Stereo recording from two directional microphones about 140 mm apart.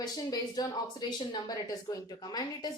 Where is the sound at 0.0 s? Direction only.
30° left (ahead or behind).